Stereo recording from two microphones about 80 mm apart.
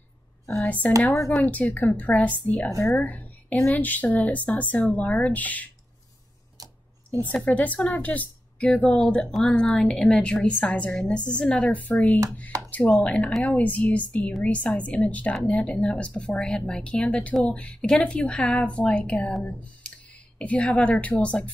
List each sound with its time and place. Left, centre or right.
0.8 s a woman's voice: centre
7.4 s a woman's voice: centre